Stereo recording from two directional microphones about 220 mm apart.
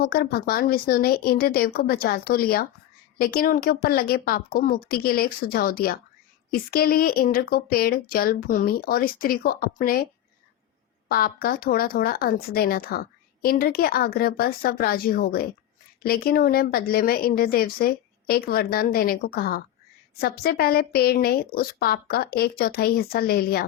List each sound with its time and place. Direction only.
0.0 s speech: 45° left (ahead or behind)
11.1 s speech: 45° left (ahead or behind)